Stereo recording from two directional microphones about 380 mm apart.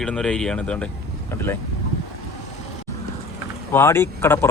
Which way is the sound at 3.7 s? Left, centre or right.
Centre.